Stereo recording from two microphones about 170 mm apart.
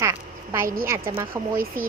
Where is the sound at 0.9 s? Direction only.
20° right (ahead or behind).